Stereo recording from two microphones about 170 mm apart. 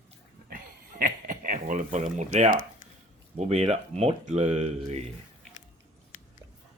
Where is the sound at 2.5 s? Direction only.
50° left (ahead or behind).